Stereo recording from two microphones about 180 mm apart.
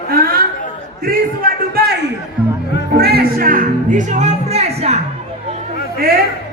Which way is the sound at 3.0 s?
60° right (ahead or behind).